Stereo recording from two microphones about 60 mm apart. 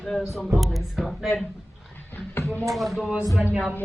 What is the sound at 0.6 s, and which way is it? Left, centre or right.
Speech, centre.